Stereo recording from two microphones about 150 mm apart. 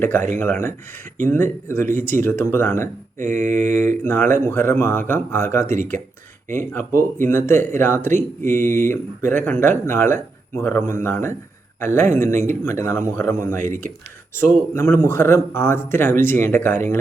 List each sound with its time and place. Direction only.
0.0 s speech: 15° left (ahead or behind)
14.7 s speech: 20° left (ahead or behind)